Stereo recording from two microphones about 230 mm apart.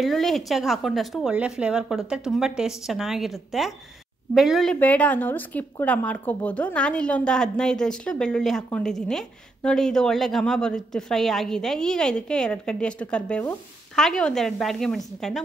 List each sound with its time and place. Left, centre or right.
0.0 s a woman's voice: centre